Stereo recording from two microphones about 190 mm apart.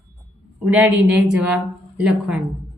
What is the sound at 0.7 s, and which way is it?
A woman's voice, 10° right (ahead or behind).